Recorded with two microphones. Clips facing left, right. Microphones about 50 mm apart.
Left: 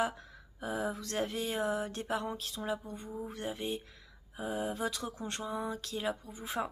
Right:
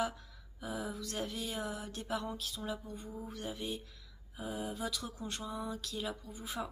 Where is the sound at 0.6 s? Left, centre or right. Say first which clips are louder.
Left 5 dB; left.